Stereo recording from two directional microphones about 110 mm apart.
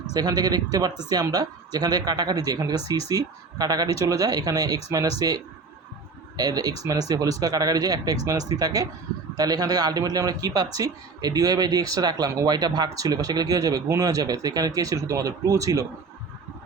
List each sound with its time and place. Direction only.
0.1 s a man's voice: 35° right (ahead or behind)
6.3 s a man's voice: 35° right (ahead or behind)